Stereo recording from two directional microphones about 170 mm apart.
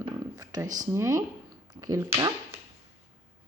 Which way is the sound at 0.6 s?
50° right (ahead or behind).